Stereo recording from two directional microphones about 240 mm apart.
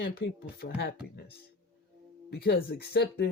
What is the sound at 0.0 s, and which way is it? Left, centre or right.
Speech, left.